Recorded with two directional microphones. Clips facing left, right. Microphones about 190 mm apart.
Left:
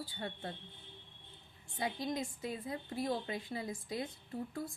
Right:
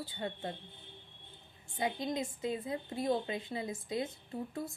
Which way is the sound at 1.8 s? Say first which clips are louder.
Right 3 dB; 20° right (ahead or behind).